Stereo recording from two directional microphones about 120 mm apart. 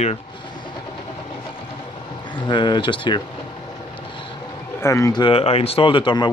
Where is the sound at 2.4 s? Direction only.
40° left (ahead or behind).